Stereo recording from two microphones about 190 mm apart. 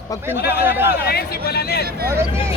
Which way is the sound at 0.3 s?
60° left (ahead or behind).